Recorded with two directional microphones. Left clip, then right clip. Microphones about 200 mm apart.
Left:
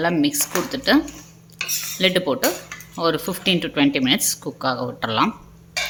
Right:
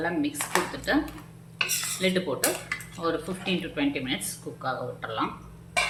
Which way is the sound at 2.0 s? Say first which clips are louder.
Left 9 dB; 60° left (ahead or behind).